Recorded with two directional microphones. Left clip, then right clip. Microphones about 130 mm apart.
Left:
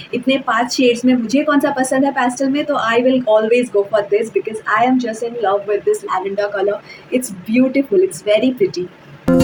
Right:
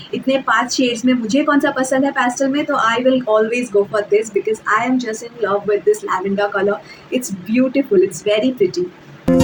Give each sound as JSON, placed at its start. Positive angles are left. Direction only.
{"t": 0.1, "sound": "a woman's voice", "side_deg": 5}